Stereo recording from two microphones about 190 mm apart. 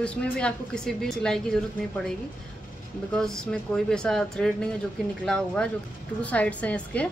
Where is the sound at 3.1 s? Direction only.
5° left (ahead or behind).